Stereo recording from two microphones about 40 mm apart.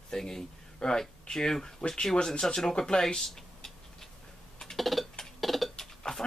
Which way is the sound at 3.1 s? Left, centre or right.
Centre.